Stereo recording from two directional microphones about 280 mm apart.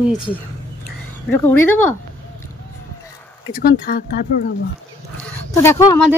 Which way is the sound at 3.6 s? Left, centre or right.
Left.